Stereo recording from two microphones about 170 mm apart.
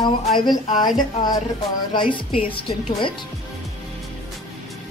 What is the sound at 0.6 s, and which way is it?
Speech, 45° left (ahead or behind).